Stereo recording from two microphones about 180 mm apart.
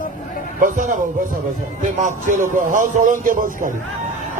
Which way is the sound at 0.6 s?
45° right (ahead or behind).